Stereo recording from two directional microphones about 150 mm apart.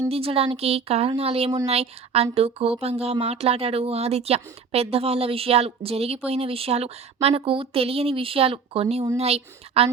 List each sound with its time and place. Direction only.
0.1 s speech: 40° right (ahead or behind)